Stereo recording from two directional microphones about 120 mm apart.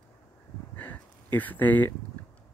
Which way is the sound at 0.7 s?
15° left (ahead or behind).